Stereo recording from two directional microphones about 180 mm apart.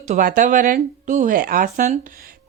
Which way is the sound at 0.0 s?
45° right (ahead or behind).